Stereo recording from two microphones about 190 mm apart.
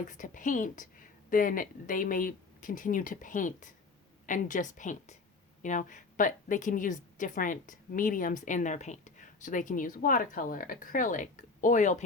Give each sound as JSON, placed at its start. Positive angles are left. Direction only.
{"t": 0.0, "sound": "a woman's voice", "side_deg": 45}